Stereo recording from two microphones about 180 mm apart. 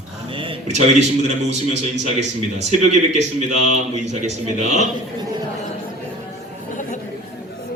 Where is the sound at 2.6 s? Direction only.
40° right (ahead or behind).